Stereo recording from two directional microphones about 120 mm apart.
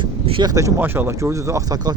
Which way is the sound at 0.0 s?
45° right (ahead or behind).